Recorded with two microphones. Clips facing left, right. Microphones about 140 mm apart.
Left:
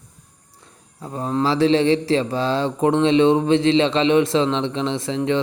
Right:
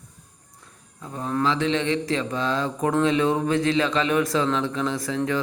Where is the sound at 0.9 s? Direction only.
35° left (ahead or behind).